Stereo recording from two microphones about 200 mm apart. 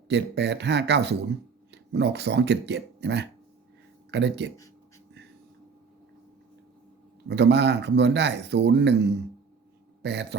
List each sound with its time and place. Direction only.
0.1 s speech: 60° right (ahead or behind)
7.3 s speech: 55° right (ahead or behind)